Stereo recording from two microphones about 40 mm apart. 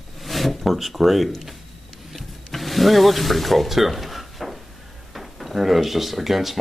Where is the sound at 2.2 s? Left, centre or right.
Centre.